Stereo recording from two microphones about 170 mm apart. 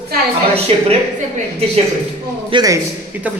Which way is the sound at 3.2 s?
10° right (ahead or behind).